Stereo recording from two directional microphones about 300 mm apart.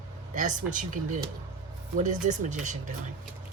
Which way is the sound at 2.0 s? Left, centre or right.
Right.